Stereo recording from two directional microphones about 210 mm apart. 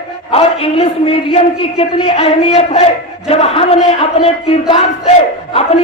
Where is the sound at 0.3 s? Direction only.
30° left (ahead or behind).